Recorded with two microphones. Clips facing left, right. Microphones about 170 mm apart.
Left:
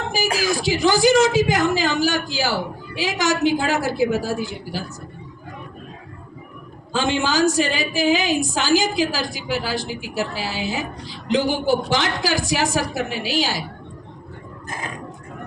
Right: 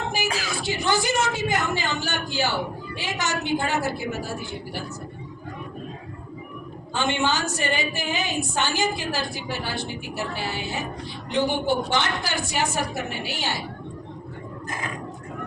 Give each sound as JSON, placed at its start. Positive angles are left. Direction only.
{"t": 0.1, "sound": "a woman's voice", "side_deg": 90}
{"t": 6.9, "sound": "a woman's voice", "side_deg": 90}